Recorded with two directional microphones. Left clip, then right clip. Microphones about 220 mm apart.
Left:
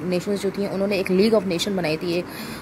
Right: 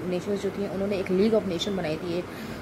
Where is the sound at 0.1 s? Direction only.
35° left (ahead or behind).